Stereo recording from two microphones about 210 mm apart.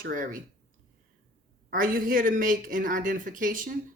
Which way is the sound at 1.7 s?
40° right (ahead or behind).